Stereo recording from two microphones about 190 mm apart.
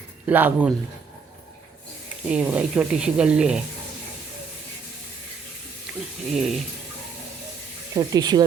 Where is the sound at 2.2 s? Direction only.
5° right (ahead or behind).